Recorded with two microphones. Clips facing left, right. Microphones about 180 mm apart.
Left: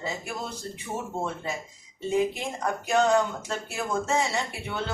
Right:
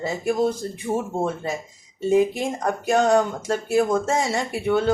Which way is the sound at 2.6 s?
45° right (ahead or behind).